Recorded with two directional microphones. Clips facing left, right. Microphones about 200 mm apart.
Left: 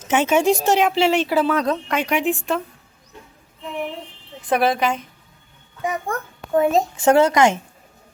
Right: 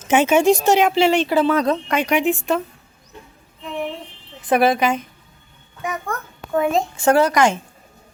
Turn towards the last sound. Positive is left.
turn(degrees=20)  # may be behind; listen again after turning